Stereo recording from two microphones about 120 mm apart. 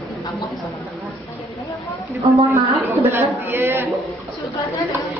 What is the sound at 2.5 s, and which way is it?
A man's voice, 25° right (ahead or behind).